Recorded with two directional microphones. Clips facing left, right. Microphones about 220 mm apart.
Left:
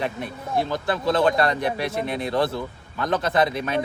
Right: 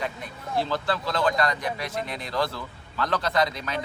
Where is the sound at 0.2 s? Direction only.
20° left (ahead or behind).